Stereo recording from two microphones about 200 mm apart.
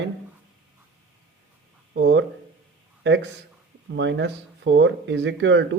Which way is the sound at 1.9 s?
60° right (ahead or behind).